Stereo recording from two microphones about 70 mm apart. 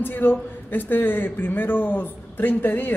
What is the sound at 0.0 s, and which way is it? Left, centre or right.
A man's voice, left.